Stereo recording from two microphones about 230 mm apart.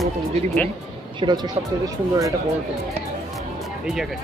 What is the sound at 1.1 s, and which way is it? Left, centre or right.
Speech, centre.